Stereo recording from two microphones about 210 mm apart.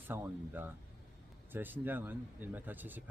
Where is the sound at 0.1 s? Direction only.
10° right (ahead or behind).